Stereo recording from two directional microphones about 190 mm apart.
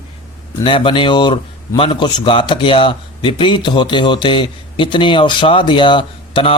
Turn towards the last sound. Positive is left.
turn(degrees=25)  # may be behind; listen again after turning